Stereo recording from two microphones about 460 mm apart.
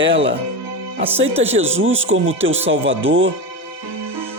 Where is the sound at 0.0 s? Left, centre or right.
Centre.